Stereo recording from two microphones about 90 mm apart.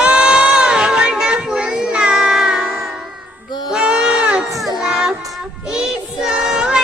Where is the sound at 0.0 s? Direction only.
10° right (ahead or behind).